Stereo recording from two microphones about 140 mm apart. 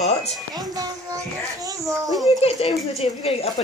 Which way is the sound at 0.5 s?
25° right (ahead or behind).